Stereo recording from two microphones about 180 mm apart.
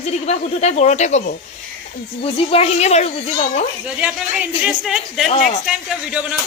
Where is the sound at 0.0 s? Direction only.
40° left (ahead or behind).